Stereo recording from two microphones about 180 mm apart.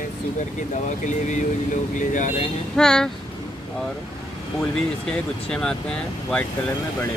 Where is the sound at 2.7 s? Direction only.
5° left (ahead or behind).